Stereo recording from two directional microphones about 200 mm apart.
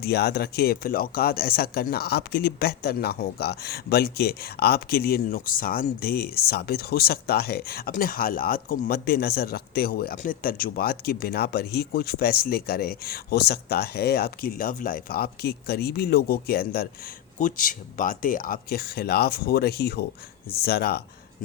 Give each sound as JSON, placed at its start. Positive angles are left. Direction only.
{"t": 0.0, "sound": "speech", "side_deg": 55}